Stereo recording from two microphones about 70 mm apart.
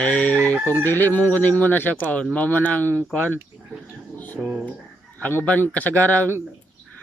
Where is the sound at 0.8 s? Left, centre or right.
Left.